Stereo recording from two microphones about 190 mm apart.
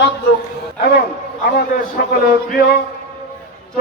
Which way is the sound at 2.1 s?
55° left (ahead or behind).